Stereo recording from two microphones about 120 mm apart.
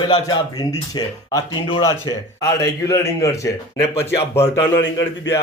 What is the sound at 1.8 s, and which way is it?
A man's voice, 30° left (ahead or behind).